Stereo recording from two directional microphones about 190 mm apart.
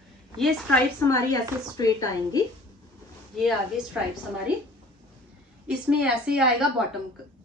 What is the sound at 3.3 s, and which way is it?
Speech, centre (ahead or behind).